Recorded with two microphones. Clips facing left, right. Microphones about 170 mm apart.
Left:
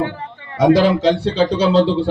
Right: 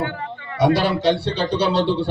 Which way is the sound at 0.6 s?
90° left.